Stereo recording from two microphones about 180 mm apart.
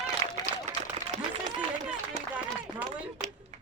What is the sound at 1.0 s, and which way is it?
Run, 40° right (ahead or behind).